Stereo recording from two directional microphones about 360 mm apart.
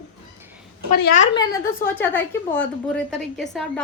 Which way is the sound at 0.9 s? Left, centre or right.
Left.